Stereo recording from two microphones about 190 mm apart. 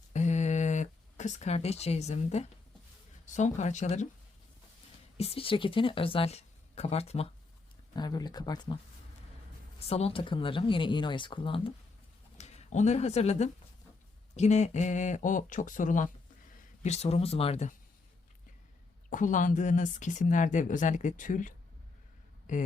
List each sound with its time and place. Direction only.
0.1 s a sound: 40° left (ahead or behind)
3.2 s speech: 40° left (ahead or behind)
5.1 s speech: 30° left (ahead or behind)
7.9 s speech: 20° left (ahead or behind)
9.9 s speech: 30° left (ahead or behind)
19.1 s speech: 40° left (ahead or behind)